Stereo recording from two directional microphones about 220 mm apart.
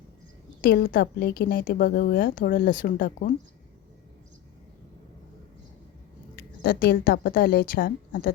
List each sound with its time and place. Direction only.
0.6 s a woman's voice: 45° left (ahead or behind)
6.3 s a woman's voice: 45° left (ahead or behind)